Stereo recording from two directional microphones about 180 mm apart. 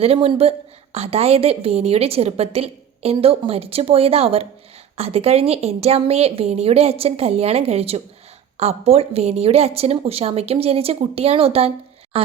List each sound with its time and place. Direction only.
0.0 s a woman's voice: 30° right (ahead or behind)